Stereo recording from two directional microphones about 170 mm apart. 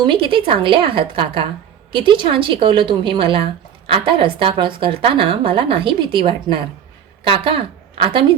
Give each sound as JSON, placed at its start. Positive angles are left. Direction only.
{"t": 0.0, "sound": "a woman's voice", "side_deg": -30}